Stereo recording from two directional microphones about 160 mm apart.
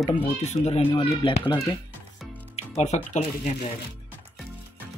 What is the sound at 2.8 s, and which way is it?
Speech, 45° left (ahead or behind).